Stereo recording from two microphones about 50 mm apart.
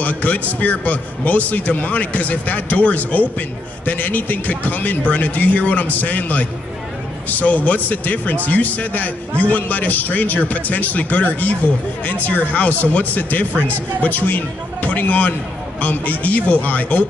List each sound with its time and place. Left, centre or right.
0.0 s a man's voice: left